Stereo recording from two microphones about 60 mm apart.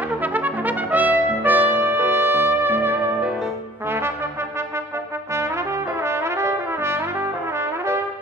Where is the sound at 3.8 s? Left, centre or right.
Right.